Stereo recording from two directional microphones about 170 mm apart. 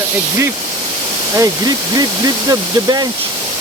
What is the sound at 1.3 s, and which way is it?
Speech, 20° right (ahead or behind).